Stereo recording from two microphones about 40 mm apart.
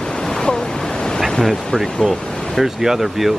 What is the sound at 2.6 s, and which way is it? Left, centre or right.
Speech, centre.